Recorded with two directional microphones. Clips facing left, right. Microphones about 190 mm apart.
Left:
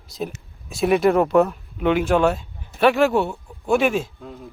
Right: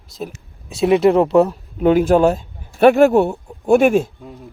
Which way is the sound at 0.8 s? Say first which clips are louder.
Right 4 dB; 25° right (ahead or behind).